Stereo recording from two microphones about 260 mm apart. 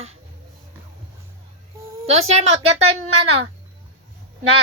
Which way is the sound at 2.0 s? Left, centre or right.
Right.